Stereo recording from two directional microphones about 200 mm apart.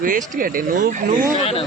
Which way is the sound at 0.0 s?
40° right (ahead or behind).